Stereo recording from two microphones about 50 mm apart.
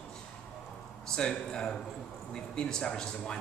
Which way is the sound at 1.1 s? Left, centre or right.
Centre.